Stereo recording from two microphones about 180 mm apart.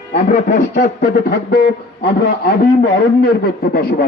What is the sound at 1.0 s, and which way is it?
A man's voice, 55° left (ahead or behind).